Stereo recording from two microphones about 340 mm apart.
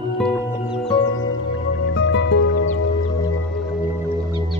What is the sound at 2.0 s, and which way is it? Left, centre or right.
Music, left.